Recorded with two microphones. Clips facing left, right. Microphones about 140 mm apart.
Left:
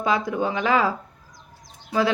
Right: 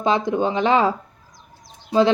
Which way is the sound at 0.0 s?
25° right (ahead or behind).